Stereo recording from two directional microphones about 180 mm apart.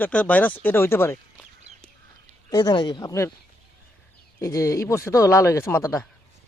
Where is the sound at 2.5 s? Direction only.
20° left (ahead or behind).